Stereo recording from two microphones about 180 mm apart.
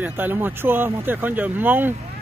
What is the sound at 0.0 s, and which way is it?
Speech, 10° right (ahead or behind).